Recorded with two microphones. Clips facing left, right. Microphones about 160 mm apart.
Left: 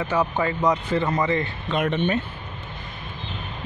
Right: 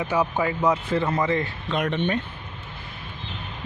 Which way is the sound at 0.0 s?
10° right (ahead or behind).